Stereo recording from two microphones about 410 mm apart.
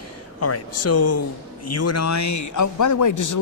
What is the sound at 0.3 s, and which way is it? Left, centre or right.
A man's voice, left.